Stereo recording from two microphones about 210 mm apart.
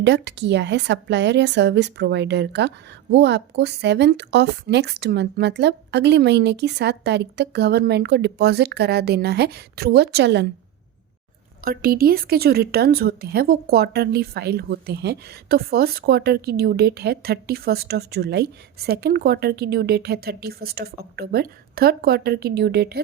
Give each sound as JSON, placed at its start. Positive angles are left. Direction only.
{"t": 0.0, "sound": "speech", "side_deg": -55}
{"t": 11.6, "sound": "speech", "side_deg": -45}